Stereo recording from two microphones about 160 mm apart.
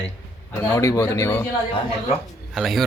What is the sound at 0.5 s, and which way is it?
Speech, 15° left (ahead or behind).